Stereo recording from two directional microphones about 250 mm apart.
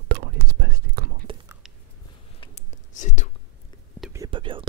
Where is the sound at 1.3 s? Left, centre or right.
Right.